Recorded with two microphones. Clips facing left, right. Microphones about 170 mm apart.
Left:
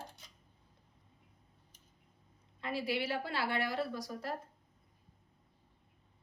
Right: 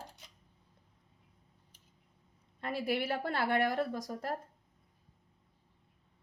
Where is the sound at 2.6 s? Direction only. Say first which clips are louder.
Right 2 dB; 50° right (ahead or behind).